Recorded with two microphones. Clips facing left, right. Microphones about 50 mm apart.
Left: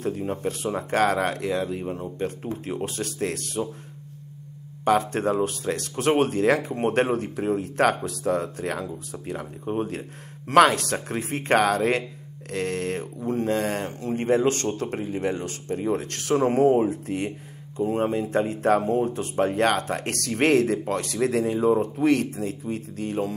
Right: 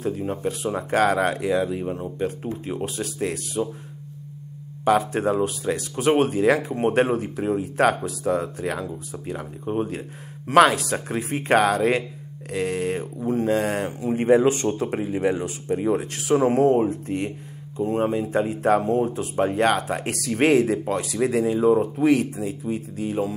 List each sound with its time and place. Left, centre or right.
0.0 s speech: centre
4.8 s speech: centre